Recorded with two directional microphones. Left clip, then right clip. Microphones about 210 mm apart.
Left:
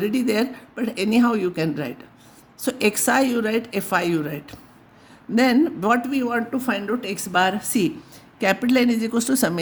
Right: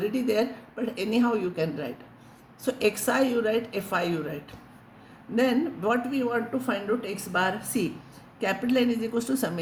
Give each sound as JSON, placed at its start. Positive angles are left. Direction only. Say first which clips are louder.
{"t": 0.0, "sound": "speech", "louder": "left 4 dB", "side_deg": 55}